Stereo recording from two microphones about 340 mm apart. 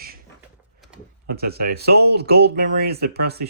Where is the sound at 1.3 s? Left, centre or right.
Right.